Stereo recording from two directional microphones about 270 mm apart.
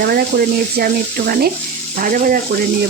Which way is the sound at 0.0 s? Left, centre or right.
Right.